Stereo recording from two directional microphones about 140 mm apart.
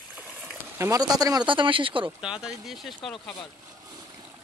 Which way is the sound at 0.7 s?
25° right (ahead or behind).